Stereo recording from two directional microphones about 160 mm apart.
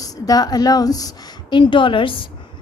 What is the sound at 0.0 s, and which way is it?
A woman's voice, 25° left (ahead or behind).